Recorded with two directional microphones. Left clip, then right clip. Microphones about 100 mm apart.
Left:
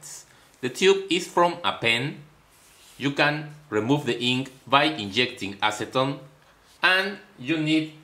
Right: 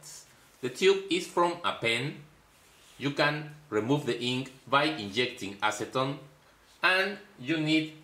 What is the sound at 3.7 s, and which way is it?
Speech, 40° left (ahead or behind).